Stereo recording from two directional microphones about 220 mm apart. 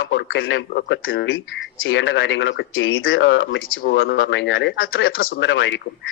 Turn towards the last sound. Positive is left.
turn(degrees=55)  # may be behind; listen again after turning